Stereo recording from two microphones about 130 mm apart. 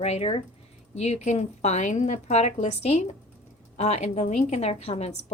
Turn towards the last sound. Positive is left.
turn(degrees=55)  # may be behind; listen again after turning